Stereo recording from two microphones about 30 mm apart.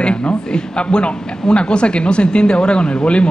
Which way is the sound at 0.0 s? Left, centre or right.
Left.